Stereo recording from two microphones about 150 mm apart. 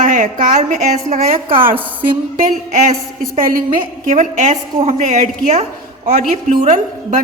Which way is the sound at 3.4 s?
70° right (ahead or behind).